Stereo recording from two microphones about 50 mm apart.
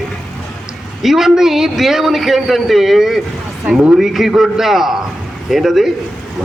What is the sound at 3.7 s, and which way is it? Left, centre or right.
Speech, centre.